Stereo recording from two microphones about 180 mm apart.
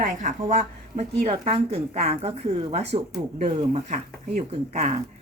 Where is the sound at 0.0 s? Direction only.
45° right (ahead or behind).